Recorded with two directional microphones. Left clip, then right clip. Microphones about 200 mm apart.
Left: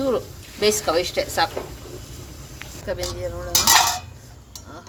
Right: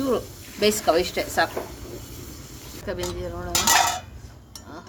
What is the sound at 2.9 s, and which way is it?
Speech, 15° right (ahead or behind).